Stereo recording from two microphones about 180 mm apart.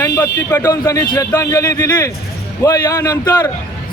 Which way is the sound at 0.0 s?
15° left (ahead or behind).